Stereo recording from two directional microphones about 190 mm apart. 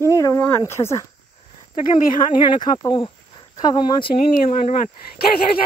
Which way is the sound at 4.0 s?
40° left (ahead or behind).